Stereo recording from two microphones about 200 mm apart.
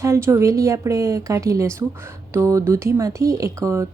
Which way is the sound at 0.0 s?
15° right (ahead or behind).